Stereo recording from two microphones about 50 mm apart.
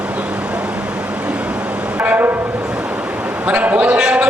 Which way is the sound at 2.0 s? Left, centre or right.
Right.